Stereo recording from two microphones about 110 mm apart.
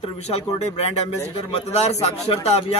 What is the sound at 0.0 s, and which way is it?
A man's voice, 65° left (ahead or behind).